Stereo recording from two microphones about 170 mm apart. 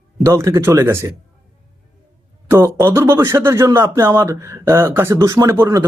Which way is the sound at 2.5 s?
15° right (ahead or behind).